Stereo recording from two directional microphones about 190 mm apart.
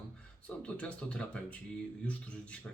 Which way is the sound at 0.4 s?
5° left (ahead or behind).